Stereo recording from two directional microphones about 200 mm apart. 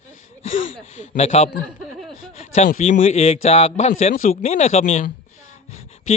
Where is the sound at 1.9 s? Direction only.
Centre (ahead or behind).